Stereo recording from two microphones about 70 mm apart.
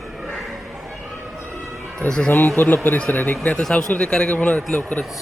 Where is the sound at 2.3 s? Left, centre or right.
Left.